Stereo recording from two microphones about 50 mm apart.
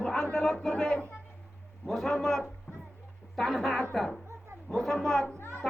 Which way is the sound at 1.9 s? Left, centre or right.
Centre.